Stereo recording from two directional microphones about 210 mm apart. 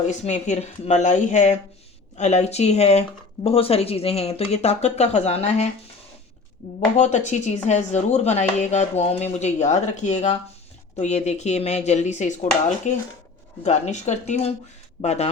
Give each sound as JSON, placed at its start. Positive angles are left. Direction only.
{"t": 0.1, "sound": "speech", "side_deg": 35}
{"t": 6.7, "sound": "speech", "side_deg": 35}